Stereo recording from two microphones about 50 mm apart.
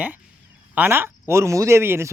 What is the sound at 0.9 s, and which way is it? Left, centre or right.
Speech, right.